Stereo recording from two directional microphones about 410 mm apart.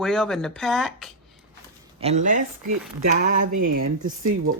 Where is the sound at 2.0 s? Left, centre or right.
Centre.